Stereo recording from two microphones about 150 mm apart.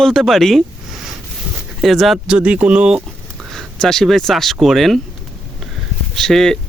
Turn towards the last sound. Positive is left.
turn(degrees=5)  # may be behind; listen again after turning